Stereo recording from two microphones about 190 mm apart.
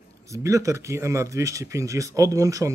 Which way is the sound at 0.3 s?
15° right (ahead or behind).